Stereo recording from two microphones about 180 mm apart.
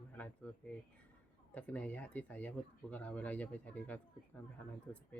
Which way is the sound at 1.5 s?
10° left (ahead or behind).